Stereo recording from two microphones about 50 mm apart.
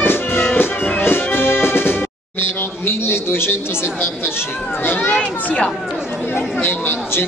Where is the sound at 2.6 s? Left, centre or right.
Left.